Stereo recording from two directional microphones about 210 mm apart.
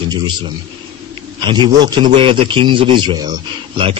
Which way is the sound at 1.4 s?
20° right (ahead or behind).